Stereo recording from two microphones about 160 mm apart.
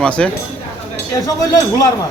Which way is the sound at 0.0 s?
5° left (ahead or behind).